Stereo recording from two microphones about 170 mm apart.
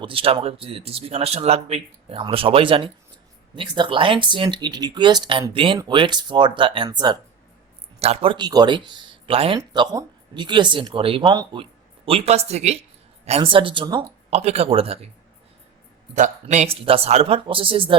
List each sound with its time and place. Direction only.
0.0 s speech: 30° right (ahead or behind)
7.9 s speech: 35° right (ahead or behind)
14.3 s speech: 40° right (ahead or behind)
16.1 s speech: 45° right (ahead or behind)